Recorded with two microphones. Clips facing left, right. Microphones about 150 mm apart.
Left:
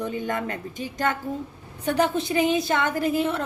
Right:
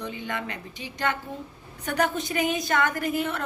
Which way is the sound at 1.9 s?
30° left (ahead or behind).